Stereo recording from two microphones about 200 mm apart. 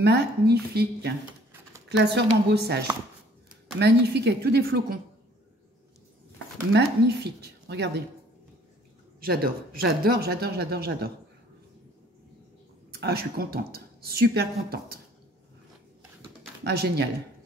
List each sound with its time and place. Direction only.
0.0 s speech: 55° right (ahead or behind)
3.8 s speech: 55° right (ahead or behind)
6.7 s speech: 55° right (ahead or behind)
9.2 s speech: 50° right (ahead or behind)
12.9 s speech: 55° right (ahead or behind)
16.6 s speech: 55° right (ahead or behind)